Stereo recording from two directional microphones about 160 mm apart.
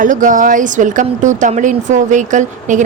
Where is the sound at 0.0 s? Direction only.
55° right (ahead or behind).